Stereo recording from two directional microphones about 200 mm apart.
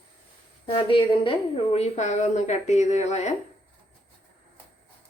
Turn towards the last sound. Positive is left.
turn(degrees=35)  # may be behind; listen again after turning